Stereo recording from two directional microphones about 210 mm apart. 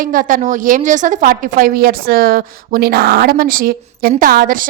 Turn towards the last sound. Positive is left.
turn(degrees=-40)  # may be behind; listen again after turning